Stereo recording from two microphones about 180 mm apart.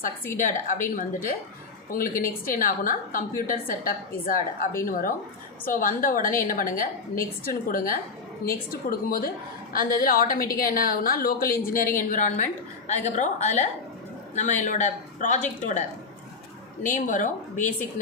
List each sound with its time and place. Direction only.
0.3 s a woman's voice: 45° left (ahead or behind)
16.8 s a woman's voice: 45° left (ahead or behind)